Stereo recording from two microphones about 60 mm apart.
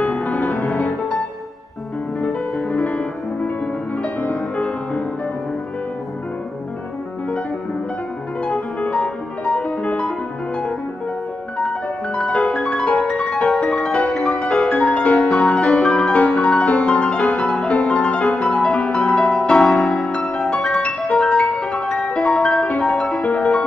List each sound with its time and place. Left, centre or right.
0.0 s music: centre
0.7 s music: centre
2.9 s music: centre
8.5 s music: centre
12.4 s piano: centre
13.7 s music: centre
14.7 s music: centre
15.6 s music: centre
16.1 s music: left
20.2 s music: centre